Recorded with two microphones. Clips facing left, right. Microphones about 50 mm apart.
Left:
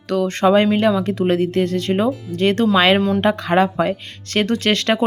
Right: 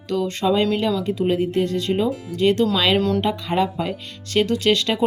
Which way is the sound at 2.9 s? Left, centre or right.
Centre.